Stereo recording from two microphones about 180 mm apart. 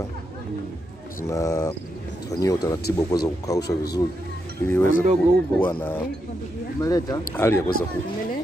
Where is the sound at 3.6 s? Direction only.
65° left (ahead or behind).